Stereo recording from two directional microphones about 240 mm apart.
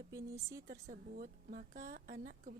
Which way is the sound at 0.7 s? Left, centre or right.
Right.